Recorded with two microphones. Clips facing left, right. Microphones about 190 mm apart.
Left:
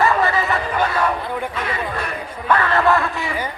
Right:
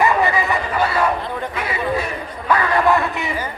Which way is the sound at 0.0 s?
15° right (ahead or behind).